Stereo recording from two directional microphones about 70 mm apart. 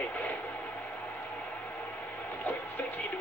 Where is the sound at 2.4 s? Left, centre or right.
Left.